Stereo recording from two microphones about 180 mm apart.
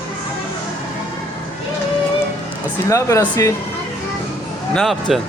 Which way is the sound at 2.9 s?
15° left (ahead or behind).